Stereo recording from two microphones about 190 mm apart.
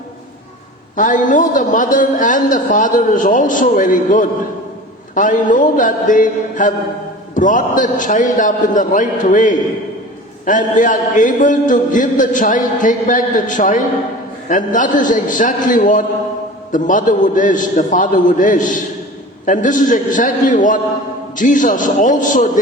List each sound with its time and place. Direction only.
0.9 s a man's voice: 45° left (ahead or behind)